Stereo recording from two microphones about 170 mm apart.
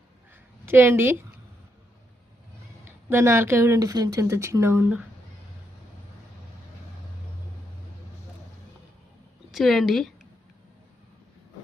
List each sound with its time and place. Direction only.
0.6 s a woman's voice: 15° right (ahead or behind)
3.1 s speech: 15° right (ahead or behind)
9.5 s speech: centre (ahead or behind)